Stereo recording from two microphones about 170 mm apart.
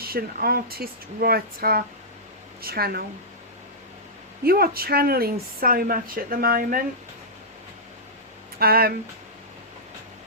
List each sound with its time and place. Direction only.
0.0 s speech: 60° right (ahead or behind)
4.4 s speech: 65° right (ahead or behind)
8.5 s speech: 65° right (ahead or behind)